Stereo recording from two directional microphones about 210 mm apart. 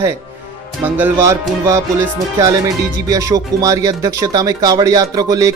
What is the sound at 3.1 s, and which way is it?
Speech, 15° right (ahead or behind).